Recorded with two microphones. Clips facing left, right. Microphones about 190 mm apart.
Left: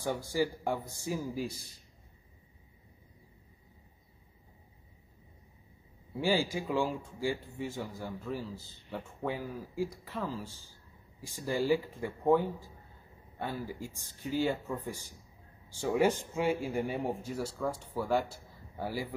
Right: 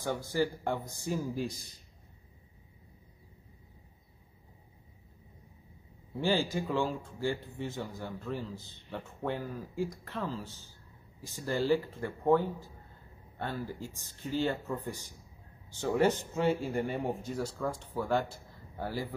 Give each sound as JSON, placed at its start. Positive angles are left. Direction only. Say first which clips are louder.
{"t": 0.0, "sound": "speech", "louder": "even", "side_deg": 10}
{"t": 6.1, "sound": "speech", "louder": "even", "side_deg": 10}
{"t": 15.8, "sound": "speech", "louder": "even", "side_deg": 10}